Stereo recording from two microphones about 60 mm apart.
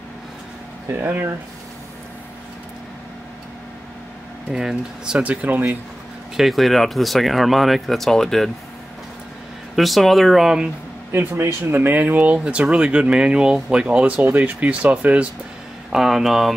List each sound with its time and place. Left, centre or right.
0.8 s speech: right
4.5 s speech: centre
5.2 s speech: right
6.3 s speech: centre
9.8 s speech: centre
11.1 s speech: right
15.9 s speech: centre